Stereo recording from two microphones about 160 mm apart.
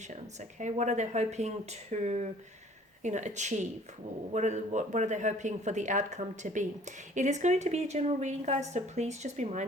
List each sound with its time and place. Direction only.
0.1 s a woman's voice: 50° right (ahead or behind)